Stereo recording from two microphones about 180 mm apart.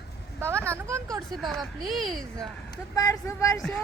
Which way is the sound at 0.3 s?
15° right (ahead or behind).